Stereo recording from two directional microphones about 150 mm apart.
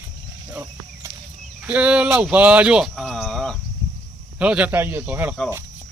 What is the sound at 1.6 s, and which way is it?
Speech, 10° right (ahead or behind).